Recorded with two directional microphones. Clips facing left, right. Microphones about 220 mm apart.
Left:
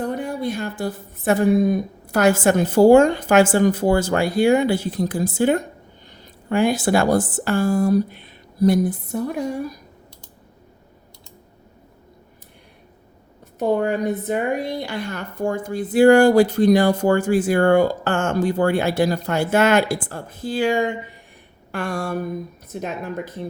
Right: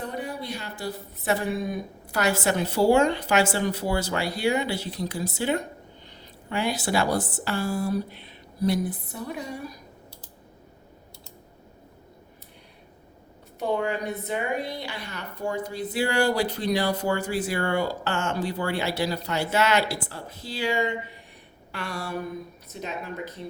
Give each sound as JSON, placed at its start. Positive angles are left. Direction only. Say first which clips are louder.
{"t": 0.0, "sound": "a woman's voice", "louder": "left 8 dB", "side_deg": 50}
{"t": 13.6, "sound": "a woman's voice", "louder": "left 7 dB", "side_deg": 45}